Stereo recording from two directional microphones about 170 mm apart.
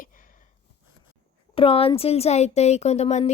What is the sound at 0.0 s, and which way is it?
Sniff, 50° left (ahead or behind).